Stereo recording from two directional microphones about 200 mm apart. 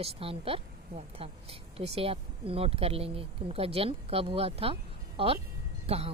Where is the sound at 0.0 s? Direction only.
30° right (ahead or behind).